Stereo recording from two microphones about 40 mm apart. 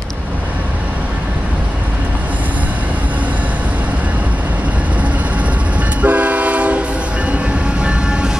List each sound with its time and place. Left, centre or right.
6.0 s train: right
7.8 s train: right